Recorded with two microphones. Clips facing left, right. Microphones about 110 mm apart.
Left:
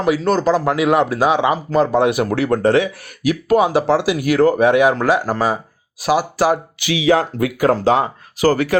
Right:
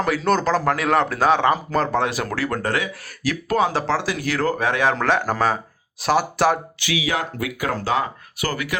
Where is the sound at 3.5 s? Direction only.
15° left (ahead or behind).